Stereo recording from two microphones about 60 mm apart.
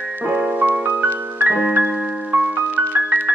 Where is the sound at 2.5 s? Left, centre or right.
Right.